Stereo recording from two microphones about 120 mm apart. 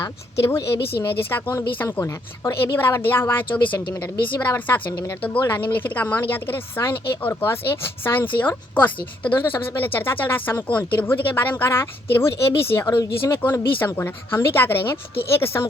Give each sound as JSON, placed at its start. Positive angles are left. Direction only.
{"t": 1.3, "sound": "a woman's voice", "side_deg": 20}
{"t": 13.4, "sound": "speech", "side_deg": 15}